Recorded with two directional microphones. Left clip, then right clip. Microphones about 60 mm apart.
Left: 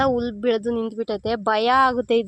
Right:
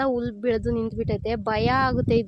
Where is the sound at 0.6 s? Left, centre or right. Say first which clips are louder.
Left 2 dB; centre.